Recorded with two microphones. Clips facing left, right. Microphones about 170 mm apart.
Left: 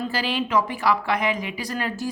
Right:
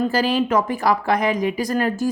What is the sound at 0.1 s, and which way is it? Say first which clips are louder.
A woman's voice: right 5 dB; 45° right (ahead or behind).